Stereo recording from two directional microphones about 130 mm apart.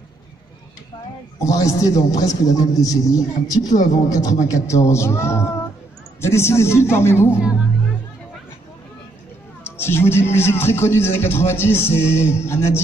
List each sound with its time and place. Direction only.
1.4 s speech: 25° left (ahead or behind)
3.6 s speech: 70° left (ahead or behind)
4.2 s speech: 25° left (ahead or behind)
9.6 s speech: 15° left (ahead or behind)